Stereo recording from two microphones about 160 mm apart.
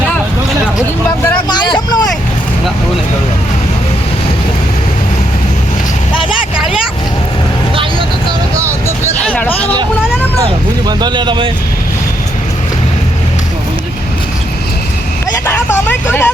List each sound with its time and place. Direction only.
1.5 s vehicle: 25° left (ahead or behind)
6.1 s vehicle: 5° right (ahead or behind)
9.1 s a sound: 10° left (ahead or behind)
10.8 s vehicle: 25° right (ahead or behind)
15.4 s vehicle: 15° left (ahead or behind)